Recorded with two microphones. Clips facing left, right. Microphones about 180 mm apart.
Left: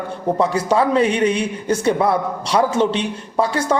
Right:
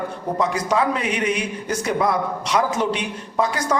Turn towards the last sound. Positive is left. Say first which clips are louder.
# left 3 dB
turn(degrees=30)  # may be behind; listen again after turning